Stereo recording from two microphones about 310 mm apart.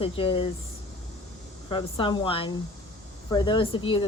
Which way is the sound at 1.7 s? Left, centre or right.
Centre.